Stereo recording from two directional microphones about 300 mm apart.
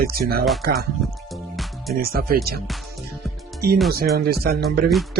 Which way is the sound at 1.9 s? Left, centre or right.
Right.